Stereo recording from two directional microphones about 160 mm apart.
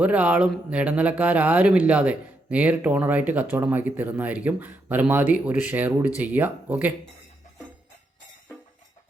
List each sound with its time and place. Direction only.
0.0 s speech: 10° right (ahead or behind)